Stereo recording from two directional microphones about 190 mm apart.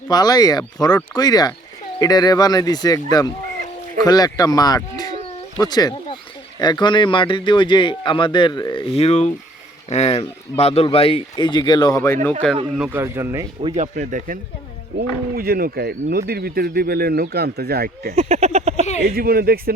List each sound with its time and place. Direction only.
0.1 s speech: 20° left (ahead or behind)
12.7 s speech: 10° right (ahead or behind)
13.6 s speech: 35° right (ahead or behind)
14.9 s speech: 50° right (ahead or behind)
18.1 s speech: 35° right (ahead or behind)
19.1 s speech: 50° right (ahead or behind)